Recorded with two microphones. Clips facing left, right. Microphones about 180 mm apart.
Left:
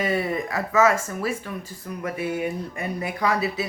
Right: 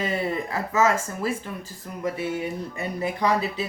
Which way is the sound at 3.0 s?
10° left (ahead or behind).